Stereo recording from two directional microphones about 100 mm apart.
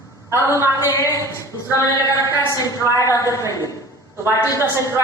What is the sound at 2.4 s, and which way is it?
Speech, 35° left (ahead or behind).